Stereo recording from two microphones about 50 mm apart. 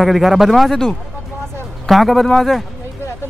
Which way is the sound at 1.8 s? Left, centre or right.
Centre.